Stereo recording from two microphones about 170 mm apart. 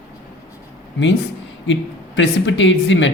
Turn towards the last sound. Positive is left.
turn(degrees=90)